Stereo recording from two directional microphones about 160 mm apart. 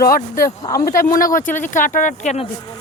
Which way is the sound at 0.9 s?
60° left (ahead or behind).